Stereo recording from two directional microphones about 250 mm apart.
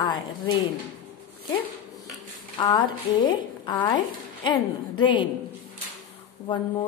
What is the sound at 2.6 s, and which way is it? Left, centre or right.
A woman's voice, centre.